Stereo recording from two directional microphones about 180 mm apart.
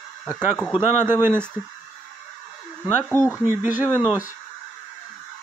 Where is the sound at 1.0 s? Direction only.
10° right (ahead or behind).